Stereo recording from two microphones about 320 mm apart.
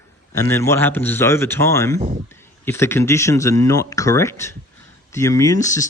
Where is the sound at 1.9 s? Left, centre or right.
Right.